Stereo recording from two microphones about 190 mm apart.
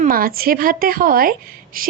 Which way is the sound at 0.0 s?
50° right (ahead or behind).